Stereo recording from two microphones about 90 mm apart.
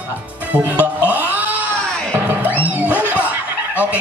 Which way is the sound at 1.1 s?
20° right (ahead or behind).